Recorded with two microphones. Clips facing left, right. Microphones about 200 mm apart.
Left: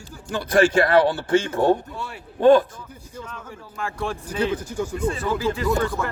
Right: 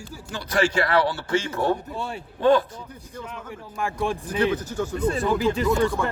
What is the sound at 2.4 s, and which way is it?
Speech, 50° left (ahead or behind).